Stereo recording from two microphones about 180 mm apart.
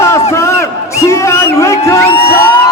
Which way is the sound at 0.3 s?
15° left (ahead or behind).